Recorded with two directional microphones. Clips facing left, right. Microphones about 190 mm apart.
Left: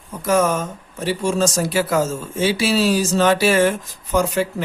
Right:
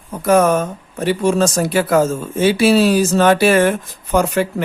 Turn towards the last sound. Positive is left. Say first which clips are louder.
# right 3 dB
turn(degrees=-60)  # may be behind; listen again after turning